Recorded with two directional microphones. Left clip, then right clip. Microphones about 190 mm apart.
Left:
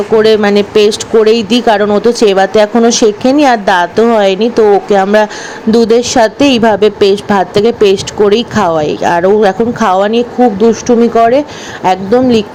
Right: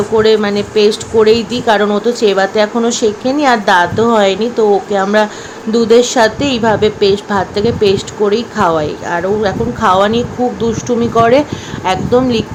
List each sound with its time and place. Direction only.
0.2 s a woman's voice: 35° left (ahead or behind)